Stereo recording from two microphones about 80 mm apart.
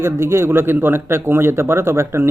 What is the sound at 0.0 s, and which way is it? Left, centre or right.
Speech, right.